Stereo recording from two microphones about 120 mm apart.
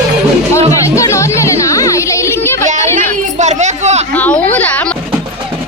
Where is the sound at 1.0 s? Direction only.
25° left (ahead or behind).